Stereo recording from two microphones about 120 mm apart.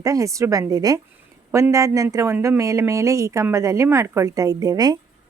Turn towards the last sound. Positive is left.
turn(degrees=-35)  # may be behind; listen again after turning